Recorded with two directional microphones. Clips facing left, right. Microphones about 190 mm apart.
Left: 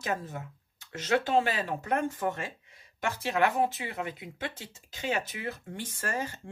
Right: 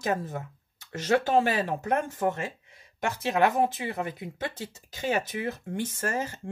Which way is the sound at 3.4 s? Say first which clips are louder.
Right 3 dB; 40° right (ahead or behind).